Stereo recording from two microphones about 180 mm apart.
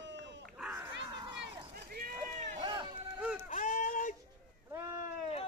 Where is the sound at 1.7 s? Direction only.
55° right (ahead or behind).